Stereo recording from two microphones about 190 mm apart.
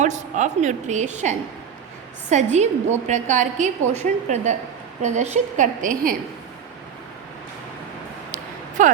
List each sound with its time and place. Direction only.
0.0 s a woman's voice: 40° right (ahead or behind)
8.8 s a woman's voice: 40° right (ahead or behind)